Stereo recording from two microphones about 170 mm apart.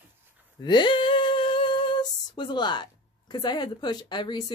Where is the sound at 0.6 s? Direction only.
25° left (ahead or behind).